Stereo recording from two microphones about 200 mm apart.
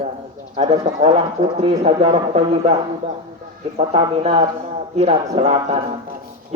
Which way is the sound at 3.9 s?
30° right (ahead or behind).